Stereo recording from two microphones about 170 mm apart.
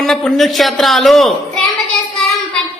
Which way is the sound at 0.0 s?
5° left (ahead or behind).